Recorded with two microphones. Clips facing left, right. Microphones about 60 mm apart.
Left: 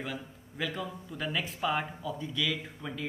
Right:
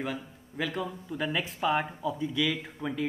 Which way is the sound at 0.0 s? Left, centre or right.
Centre.